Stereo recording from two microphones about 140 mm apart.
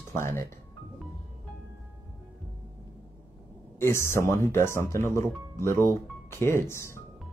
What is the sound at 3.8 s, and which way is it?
Speech, 20° left (ahead or behind).